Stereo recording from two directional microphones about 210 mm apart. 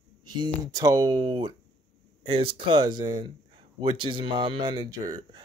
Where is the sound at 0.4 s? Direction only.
20° right (ahead or behind).